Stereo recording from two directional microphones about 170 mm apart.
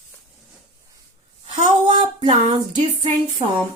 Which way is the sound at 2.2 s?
30° right (ahead or behind).